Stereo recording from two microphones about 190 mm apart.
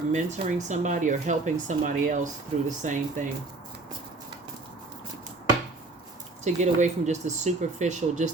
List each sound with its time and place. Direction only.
0.1 s speech: 40° right (ahead or behind)
6.4 s speech: 35° right (ahead or behind)